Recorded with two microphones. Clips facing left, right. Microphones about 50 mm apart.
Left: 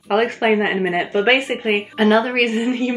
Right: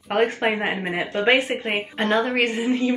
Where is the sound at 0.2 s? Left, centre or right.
Left.